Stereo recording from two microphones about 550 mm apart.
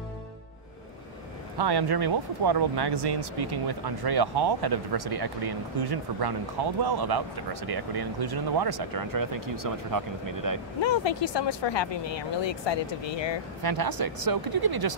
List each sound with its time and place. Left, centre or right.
1.6 s speech: right
10.8 s speech: left
13.6 s speech: right